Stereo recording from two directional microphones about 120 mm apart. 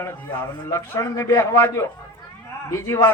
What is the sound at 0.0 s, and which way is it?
A man's voice, 20° left (ahead or behind).